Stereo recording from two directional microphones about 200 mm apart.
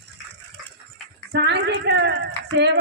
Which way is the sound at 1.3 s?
60° right (ahead or behind).